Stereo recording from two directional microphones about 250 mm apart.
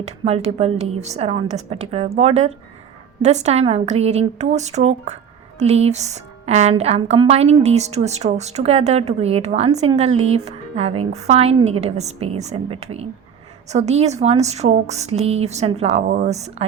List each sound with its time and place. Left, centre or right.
0.0 s speech: right